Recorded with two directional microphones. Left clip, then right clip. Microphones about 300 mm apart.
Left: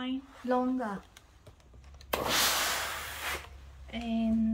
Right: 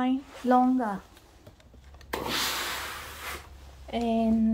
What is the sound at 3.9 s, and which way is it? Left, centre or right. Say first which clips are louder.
Speech: right 8 dB; centre.